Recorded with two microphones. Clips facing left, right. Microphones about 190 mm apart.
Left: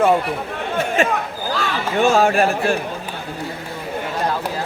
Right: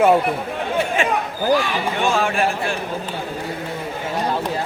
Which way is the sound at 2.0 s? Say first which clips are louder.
Left 6 dB; 40° left (ahead or behind).